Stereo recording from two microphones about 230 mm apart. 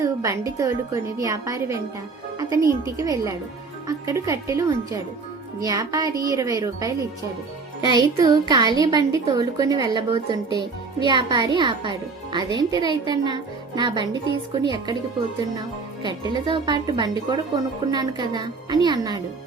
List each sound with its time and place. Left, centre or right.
0.0 s speech: centre
7.9 s a child's voice: centre
16.3 s a child's voice: centre